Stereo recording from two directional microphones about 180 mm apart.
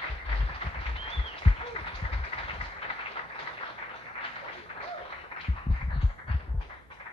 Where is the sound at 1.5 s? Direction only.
25° left (ahead or behind).